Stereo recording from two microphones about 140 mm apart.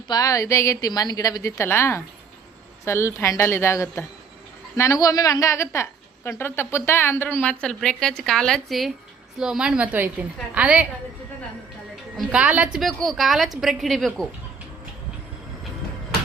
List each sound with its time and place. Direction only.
0.1 s a woman's voice: 25° left (ahead or behind); by 10.8 s 10° right (ahead or behind)
12.1 s a woman's voice: 10° right (ahead or behind)